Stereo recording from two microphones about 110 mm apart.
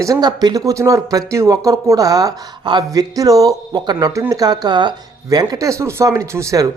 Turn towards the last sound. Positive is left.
turn(degrees=-30)  # may be behind; listen again after turning